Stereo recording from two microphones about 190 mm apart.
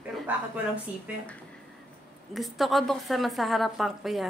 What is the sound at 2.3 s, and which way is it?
A woman's voice, centre (ahead or behind).